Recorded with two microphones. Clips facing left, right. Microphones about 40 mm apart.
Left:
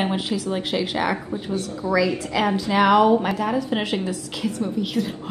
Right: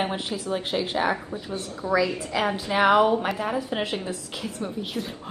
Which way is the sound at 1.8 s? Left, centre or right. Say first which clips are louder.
Left 2 dB; right.